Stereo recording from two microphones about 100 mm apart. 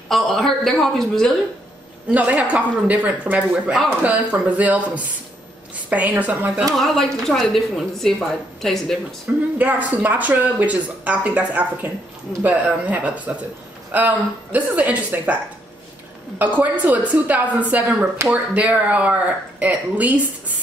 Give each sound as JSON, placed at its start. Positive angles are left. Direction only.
{"t": 0.1, "sound": "a woman's voice", "side_deg": 5}
{"t": 2.0, "sound": "speech", "side_deg": -15}
{"t": 6.8, "sound": "a woman's voice", "side_deg": 0}
{"t": 9.6, "sound": "speech", "side_deg": -15}
{"t": 16.3, "sound": "speech", "side_deg": -15}